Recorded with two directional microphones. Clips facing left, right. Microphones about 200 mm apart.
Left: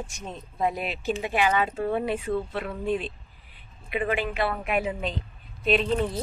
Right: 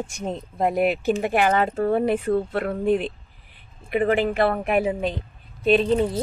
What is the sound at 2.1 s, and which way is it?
Speech, 55° right (ahead or behind).